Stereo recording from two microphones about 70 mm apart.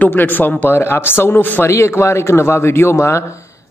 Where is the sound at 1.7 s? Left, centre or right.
Left.